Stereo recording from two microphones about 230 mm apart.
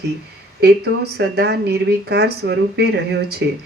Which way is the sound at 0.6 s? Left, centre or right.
Right.